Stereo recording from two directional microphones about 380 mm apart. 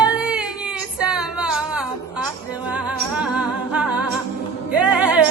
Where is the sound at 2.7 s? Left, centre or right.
Centre.